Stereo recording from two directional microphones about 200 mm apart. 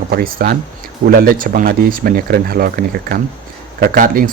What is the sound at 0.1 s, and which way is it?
Speech, 45° right (ahead or behind).